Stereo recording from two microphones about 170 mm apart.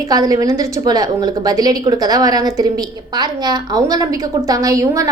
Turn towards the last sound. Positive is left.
turn(degrees=-20)  # may be behind; listen again after turning